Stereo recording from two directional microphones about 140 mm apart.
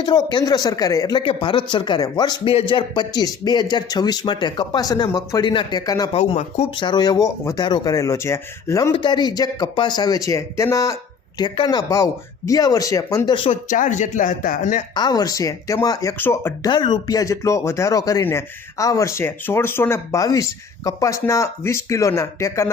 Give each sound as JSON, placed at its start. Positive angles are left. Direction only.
{"t": 0.0, "sound": "speech", "side_deg": 35}
{"t": 1.2, "sound": "a man's voice", "side_deg": 40}
{"t": 6.1, "sound": "speech", "side_deg": 50}
{"t": 6.7, "sound": "speech", "side_deg": 35}
{"t": 8.9, "sound": "speech", "side_deg": 35}
{"t": 11.3, "sound": "a man's voice", "side_deg": 35}
{"t": 13.7, "sound": "speech", "side_deg": 65}
{"t": 14.9, "sound": "speech", "side_deg": 30}
{"t": 16.6, "sound": "speech", "side_deg": 35}